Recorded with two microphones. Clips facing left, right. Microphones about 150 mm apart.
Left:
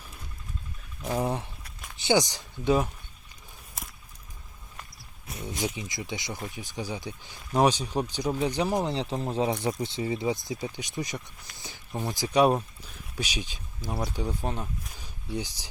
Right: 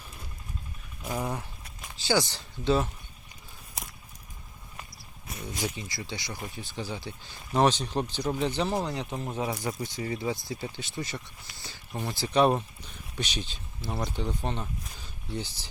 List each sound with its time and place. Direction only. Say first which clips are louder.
1.2 s a sound: left 4 dB; 30° left (ahead or behind)
2.0 s speech: left 3 dB; 20° left (ahead or behind)
5.5 s speech: left 2 dB; 15° left (ahead or behind)
8.9 s speech: left 4 dB; 30° left (ahead or behind); by 15.6 s 15° left (ahead or behind)